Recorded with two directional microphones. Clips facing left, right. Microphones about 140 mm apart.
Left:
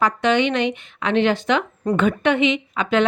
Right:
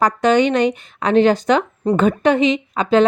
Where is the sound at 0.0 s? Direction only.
40° right (ahead or behind).